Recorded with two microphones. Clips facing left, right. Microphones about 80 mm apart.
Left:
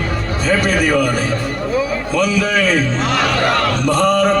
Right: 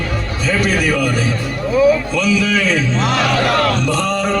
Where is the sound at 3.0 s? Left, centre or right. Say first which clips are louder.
Right 1 dB; centre.